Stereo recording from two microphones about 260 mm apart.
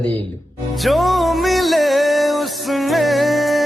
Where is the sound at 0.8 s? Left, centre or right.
Centre.